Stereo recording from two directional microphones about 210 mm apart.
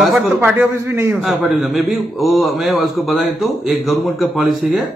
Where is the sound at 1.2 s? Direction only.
Centre (ahead or behind).